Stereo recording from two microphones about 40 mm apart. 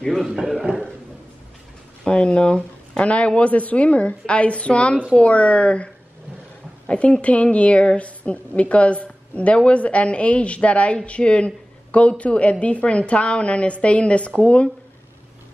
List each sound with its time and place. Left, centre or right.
0.7 s speech: right
2.0 s speech: left
6.9 s speech: left
7.8 s speech: left